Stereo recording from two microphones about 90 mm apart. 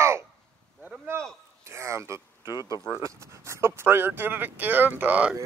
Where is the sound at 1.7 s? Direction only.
30° right (ahead or behind).